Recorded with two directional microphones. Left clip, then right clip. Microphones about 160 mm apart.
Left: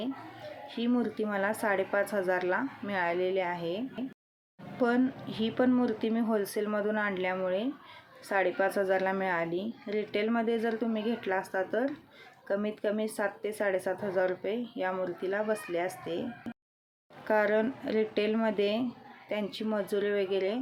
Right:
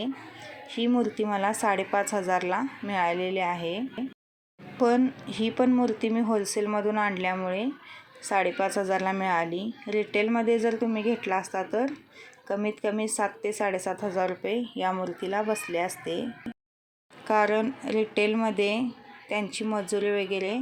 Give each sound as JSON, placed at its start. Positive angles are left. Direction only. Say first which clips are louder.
{"t": 0.7, "sound": "speech", "louder": "right 5 dB", "side_deg": -15}
{"t": 17.2, "sound": "speech", "louder": "right 3 dB", "side_deg": -10}